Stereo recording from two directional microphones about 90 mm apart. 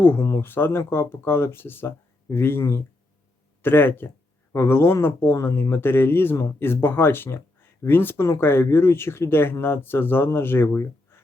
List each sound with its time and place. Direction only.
0.0 s speech: 25° left (ahead or behind)